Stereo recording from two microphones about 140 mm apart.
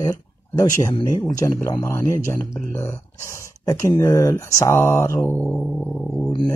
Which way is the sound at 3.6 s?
25° left (ahead or behind).